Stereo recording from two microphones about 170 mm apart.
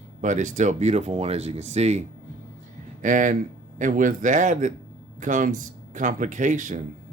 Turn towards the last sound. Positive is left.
turn(degrees=-50)  # may be behind; listen again after turning